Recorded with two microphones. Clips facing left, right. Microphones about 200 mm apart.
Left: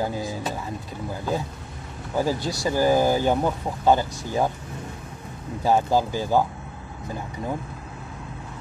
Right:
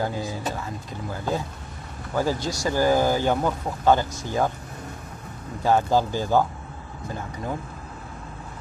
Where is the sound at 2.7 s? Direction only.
15° left (ahead or behind).